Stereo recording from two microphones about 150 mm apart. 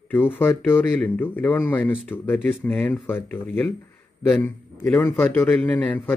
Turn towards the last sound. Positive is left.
turn(degrees=10)  # may be behind; listen again after turning